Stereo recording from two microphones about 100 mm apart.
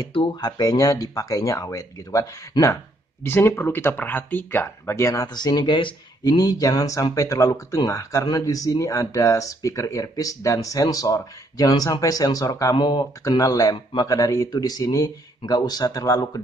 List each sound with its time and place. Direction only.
0.1 s speech: 50° left (ahead or behind)
12.7 s speech: 50° left (ahead or behind)
13.4 s speech: 35° left (ahead or behind)